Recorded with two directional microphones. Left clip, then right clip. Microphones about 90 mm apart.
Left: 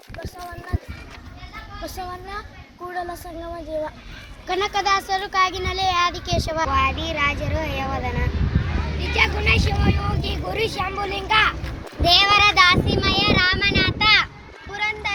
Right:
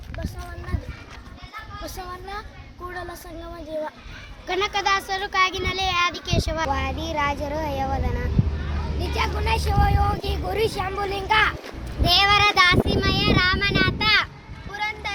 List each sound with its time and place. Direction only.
1.8 s speech: 45° right (ahead or behind)
4.4 s speech: 30° right (ahead or behind); by 14.3 s 85° right
14.7 s a sound: 45° right (ahead or behind)